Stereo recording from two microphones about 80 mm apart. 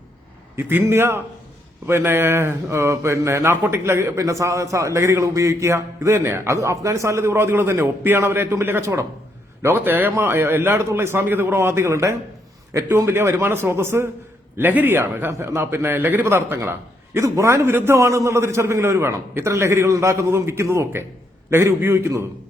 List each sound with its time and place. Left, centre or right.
0.5 s a man's voice: right